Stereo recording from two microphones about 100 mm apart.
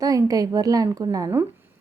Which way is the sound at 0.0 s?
35° right (ahead or behind).